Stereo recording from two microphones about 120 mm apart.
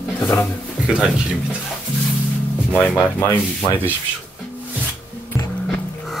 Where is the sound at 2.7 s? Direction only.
15° left (ahead or behind).